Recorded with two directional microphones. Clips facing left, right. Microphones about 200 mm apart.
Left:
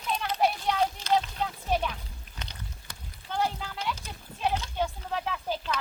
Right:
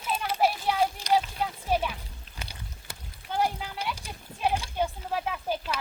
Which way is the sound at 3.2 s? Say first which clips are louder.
Right 2 dB; 10° right (ahead or behind).